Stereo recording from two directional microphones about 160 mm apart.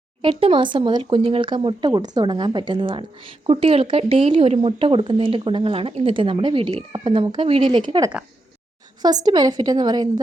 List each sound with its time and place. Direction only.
0.2 s a woman's voice: 35° right (ahead or behind)